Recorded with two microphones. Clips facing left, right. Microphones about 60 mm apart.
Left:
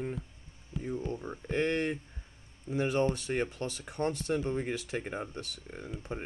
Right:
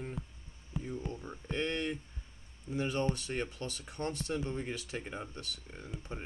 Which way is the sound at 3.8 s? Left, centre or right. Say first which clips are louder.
Left 6 dB; left.